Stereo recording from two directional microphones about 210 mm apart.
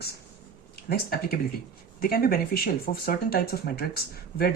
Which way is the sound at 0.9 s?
45° left (ahead or behind).